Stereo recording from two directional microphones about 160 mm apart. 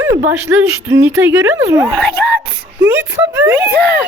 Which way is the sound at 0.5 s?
15° right (ahead or behind).